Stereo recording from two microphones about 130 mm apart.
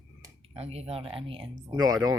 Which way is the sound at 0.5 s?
50° right (ahead or behind).